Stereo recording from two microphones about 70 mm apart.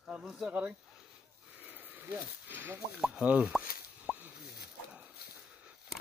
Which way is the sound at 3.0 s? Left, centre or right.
Centre.